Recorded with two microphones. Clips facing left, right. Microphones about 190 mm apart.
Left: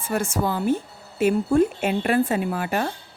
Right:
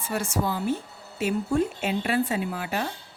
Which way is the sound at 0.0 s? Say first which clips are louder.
Left 3 dB; 50° left (ahead or behind).